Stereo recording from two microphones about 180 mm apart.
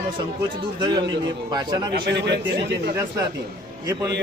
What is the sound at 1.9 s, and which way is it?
A man's voice, 70° right (ahead or behind).